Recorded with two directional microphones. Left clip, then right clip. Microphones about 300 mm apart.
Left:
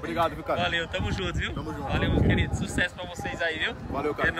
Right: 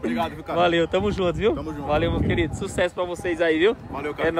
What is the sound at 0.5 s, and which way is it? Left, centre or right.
A man's voice, centre.